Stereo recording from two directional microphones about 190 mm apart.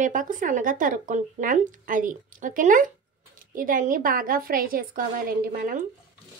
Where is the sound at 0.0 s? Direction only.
45° right (ahead or behind).